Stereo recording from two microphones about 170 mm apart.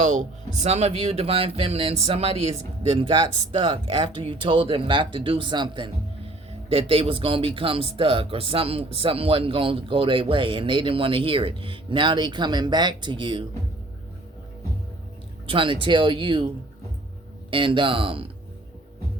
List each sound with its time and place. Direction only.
0.0 s speech: 45° right (ahead or behind); by 13.4 s 25° right (ahead or behind)
15.4 s speech: 30° right (ahead or behind)
17.5 s speech: 30° right (ahead or behind)